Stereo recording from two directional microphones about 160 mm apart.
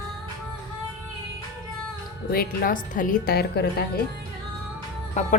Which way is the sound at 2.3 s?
65° left (ahead or behind).